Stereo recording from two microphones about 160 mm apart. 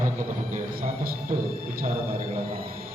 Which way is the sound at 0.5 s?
60° right (ahead or behind).